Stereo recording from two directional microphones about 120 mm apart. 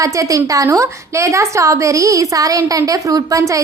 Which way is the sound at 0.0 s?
30° right (ahead or behind).